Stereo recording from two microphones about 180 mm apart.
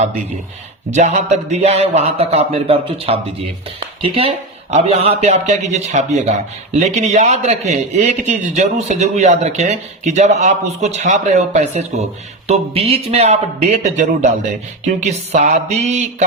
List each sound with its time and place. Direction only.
0.9 s a man's voice: 40° right (ahead or behind)